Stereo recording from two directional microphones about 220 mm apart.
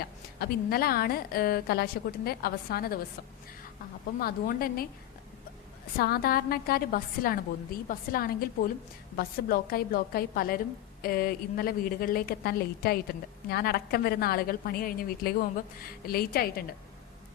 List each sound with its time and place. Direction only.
0.0 s a woman's voice: 45° left (ahead or behind)
4.2 s a woman's voice: 40° left (ahead or behind)
6.0 s a woman's voice: 45° left (ahead or behind)